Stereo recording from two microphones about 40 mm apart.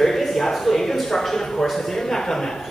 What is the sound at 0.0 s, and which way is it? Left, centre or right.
Speech, centre.